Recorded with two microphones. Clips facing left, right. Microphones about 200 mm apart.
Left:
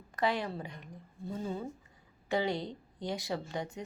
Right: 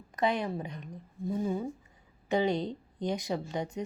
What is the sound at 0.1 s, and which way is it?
A woman's voice, 20° right (ahead or behind).